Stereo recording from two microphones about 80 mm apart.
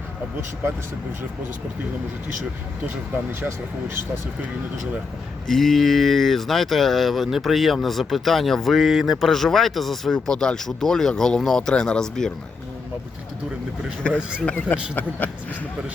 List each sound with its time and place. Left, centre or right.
3.4 s speech: right
5.5 s speech: centre
14.0 s speech: centre